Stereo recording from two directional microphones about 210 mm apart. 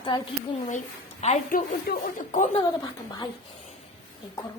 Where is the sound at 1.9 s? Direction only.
45° left (ahead or behind).